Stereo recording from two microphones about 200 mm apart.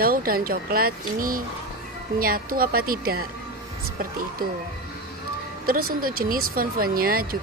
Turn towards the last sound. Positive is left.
turn(degrees=-45)  # may be behind; listen again after turning